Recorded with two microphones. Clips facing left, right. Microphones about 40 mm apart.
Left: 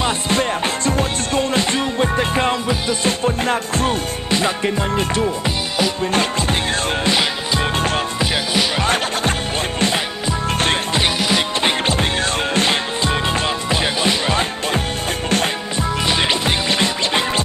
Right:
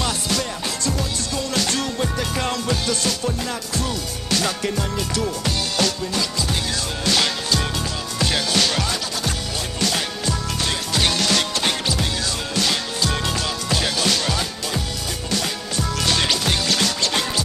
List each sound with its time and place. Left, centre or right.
0.0 s music: left
3.1 s music: left
4.3 s music: left
7.1 s music: left
8.8 s music: left
9.8 s music: left
12.5 s music: left
15.2 s music: left
16.1 s music: left